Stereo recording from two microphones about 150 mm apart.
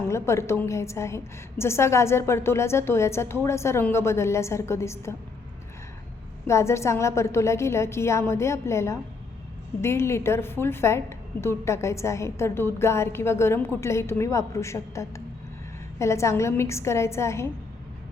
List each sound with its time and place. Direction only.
0.1 s a woman's voice: 20° left (ahead or behind)
6.5 s a woman's voice: 20° left (ahead or behind)